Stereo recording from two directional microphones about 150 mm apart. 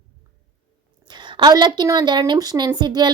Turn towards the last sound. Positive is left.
turn(degrees=-30)  # may be behind; listen again after turning